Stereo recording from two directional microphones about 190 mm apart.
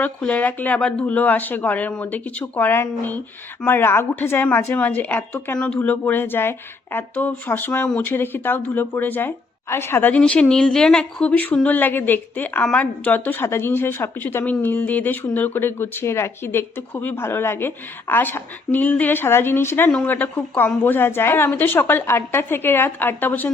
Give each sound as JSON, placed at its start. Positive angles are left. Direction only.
{"t": 0.0, "sound": "a woman's voice", "side_deg": 10}